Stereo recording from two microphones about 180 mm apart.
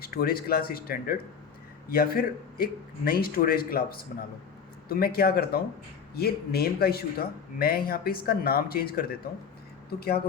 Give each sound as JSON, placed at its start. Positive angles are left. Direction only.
{"t": 0.0, "sound": "a man's voice", "side_deg": 60}